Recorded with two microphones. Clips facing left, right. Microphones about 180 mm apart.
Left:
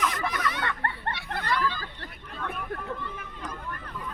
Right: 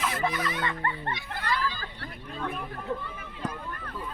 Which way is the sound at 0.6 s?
60° left (ahead or behind).